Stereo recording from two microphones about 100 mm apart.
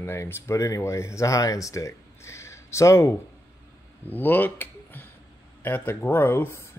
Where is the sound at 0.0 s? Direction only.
25° left (ahead or behind).